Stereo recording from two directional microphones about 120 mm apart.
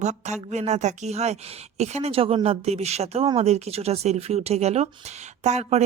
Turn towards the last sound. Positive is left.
turn(degrees=-70)  # may be behind; listen again after turning